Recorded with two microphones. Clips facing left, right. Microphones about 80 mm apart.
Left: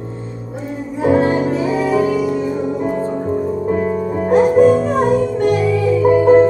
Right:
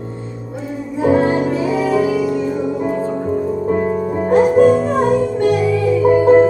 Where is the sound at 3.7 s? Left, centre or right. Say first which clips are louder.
Right 1 dB; right.